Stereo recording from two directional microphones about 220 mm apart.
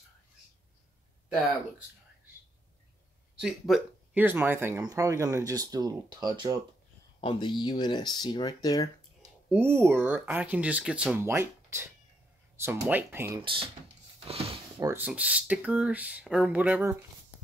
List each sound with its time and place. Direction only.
3.3 s speech: centre (ahead or behind); by 6.6 s 20° right (ahead or behind)
7.2 s speech: 20° left (ahead or behind)
9.2 s speech: 10° right (ahead or behind)
13.4 s speech: 25° right (ahead or behind)
14.2 s a sound: 25° right (ahead or behind)
14.8 s speech: 10° right (ahead or behind)